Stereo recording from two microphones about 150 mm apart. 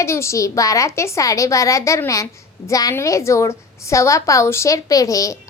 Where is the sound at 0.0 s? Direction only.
20° left (ahead or behind).